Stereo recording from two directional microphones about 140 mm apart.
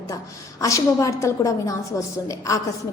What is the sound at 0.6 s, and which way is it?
A woman's voice, 25° left (ahead or behind).